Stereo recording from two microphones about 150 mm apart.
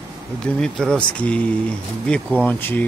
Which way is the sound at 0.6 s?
5° left (ahead or behind).